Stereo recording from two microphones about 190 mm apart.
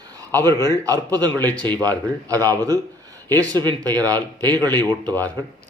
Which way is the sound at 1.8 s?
20° right (ahead or behind).